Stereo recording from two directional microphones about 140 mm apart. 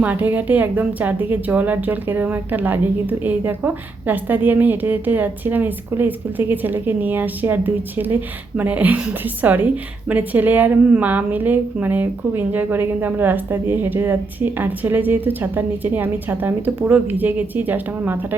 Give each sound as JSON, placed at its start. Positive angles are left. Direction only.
{"t": 0.0, "sound": "a woman's voice", "side_deg": -10}